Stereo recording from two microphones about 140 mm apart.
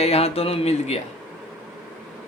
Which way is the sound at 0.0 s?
45° left (ahead or behind).